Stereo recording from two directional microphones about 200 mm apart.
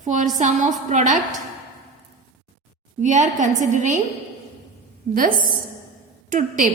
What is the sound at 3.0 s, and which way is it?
Speech, 40° right (ahead or behind).